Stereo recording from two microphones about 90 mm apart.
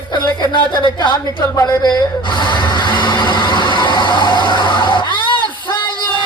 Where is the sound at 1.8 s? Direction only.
55° left (ahead or behind).